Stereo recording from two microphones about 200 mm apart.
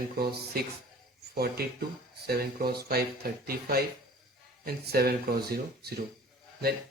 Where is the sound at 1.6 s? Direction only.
50° right (ahead or behind).